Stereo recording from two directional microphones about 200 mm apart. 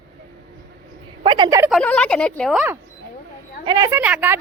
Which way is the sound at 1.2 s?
25° right (ahead or behind).